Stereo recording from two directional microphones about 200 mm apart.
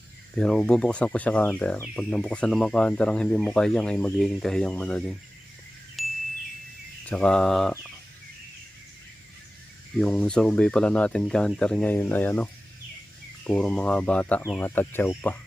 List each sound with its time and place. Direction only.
0.3 s speech: 5° left (ahead or behind)
6.0 s chime: centre (ahead or behind)
7.0 s speech: 5° left (ahead or behind)
10.0 s speech: 5° left (ahead or behind)
13.5 s speech: 5° left (ahead or behind)